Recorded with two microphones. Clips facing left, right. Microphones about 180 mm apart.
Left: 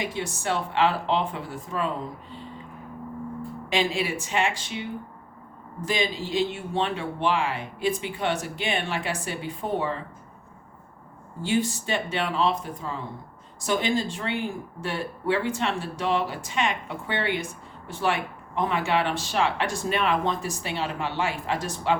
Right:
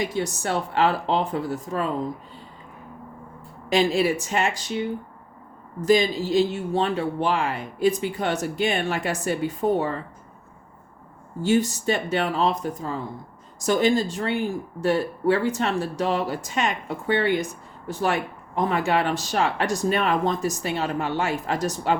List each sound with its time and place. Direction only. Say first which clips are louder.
0.0 s speech: right 4 dB; 40° right (ahead or behind)
3.7 s speech: right 6 dB; 40° right (ahead or behind)
11.4 s speech: right 5 dB; 45° right (ahead or behind)